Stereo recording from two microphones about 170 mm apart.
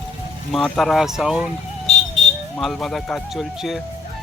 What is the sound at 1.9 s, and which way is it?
Vehicle, 40° left (ahead or behind).